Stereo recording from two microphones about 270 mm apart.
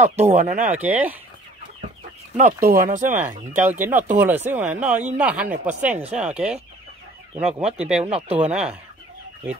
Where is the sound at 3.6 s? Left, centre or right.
Centre.